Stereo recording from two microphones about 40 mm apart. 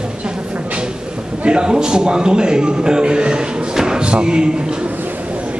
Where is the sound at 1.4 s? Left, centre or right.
Right.